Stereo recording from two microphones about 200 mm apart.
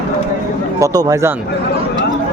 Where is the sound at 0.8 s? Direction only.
15° right (ahead or behind).